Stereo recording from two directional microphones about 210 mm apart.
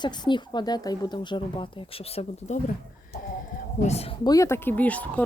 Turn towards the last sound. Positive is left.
turn(degrees=5)  # may be behind; listen again after turning